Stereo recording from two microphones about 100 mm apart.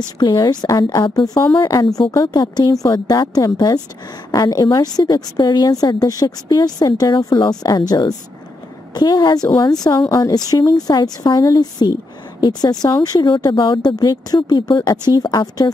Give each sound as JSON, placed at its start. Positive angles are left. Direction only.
{"t": 0.2, "sound": "a woman's voice", "side_deg": 45}